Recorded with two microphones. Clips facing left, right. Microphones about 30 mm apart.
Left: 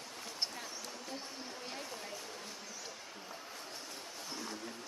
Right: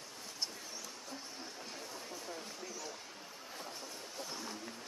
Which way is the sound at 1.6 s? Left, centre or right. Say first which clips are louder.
Left 4 dB; left.